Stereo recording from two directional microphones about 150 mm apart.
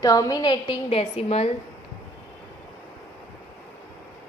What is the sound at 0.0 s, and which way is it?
A woman's voice, 25° left (ahead or behind).